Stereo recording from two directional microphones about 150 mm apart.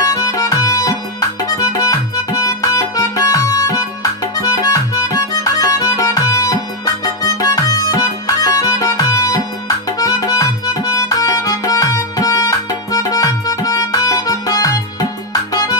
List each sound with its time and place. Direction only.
0.0 s music: 20° left (ahead or behind)